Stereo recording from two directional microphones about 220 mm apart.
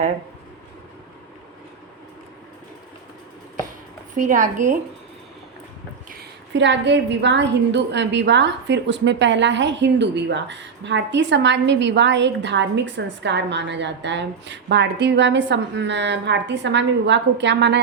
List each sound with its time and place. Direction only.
4.1 s a woman's voice: 35° right (ahead or behind)
6.1 s a woman's voice: 50° right (ahead or behind)